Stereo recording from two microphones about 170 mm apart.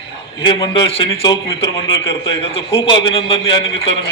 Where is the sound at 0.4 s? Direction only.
30° left (ahead or behind).